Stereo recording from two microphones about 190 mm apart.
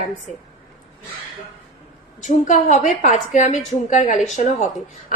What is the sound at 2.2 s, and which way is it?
A woman's voice, 40° left (ahead or behind).